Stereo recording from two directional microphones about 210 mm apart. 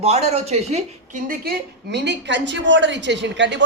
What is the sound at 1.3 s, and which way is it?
A woman's voice, 50° right (ahead or behind).